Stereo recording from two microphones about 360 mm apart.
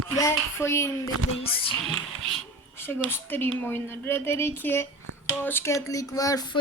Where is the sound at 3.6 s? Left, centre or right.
Centre.